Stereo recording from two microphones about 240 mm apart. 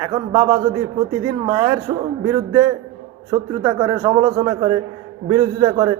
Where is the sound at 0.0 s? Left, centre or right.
Centre.